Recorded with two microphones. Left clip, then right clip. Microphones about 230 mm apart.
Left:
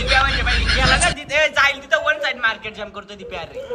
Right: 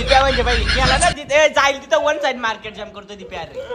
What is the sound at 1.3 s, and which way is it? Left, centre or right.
Speech, right.